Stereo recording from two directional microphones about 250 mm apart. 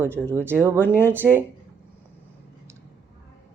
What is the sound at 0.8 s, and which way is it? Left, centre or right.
Speech, centre.